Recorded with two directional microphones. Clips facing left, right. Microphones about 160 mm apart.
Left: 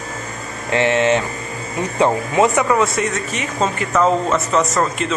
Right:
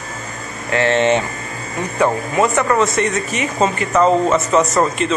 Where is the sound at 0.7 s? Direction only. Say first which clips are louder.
Even; 20° left (ahead or behind).